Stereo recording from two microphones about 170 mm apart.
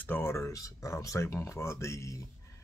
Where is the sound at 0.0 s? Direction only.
15° left (ahead or behind).